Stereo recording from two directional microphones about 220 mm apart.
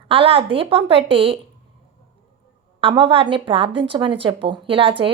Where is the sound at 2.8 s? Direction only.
25° right (ahead or behind).